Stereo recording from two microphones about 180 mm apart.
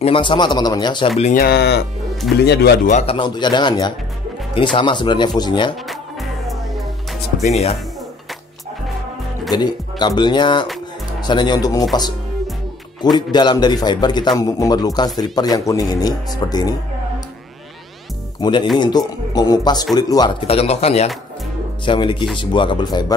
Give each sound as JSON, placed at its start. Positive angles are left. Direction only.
{"t": 0.0, "sound": "a man's voice", "side_deg": 30}
{"t": 1.3, "sound": "speech", "side_deg": 60}
{"t": 2.9, "sound": "speech", "side_deg": 40}
{"t": 3.2, "sound": "a man's voice", "side_deg": 25}
{"t": 7.4, "sound": "speech", "side_deg": 35}
{"t": 9.5, "sound": "a man's voice", "side_deg": 25}
{"t": 13.0, "sound": "a man's voice", "side_deg": 25}
{"t": 18.4, "sound": "a man's voice", "side_deg": 25}